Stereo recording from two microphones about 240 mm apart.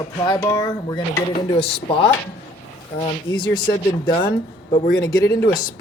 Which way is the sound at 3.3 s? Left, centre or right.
Centre.